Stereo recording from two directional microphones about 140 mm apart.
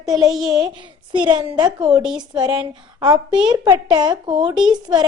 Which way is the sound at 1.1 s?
35° right (ahead or behind).